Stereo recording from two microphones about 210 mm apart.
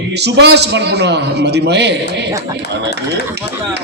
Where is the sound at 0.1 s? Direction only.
55° right (ahead or behind).